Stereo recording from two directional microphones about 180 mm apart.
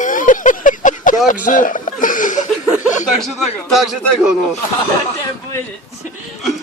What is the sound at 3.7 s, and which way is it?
Speech, centre (ahead or behind).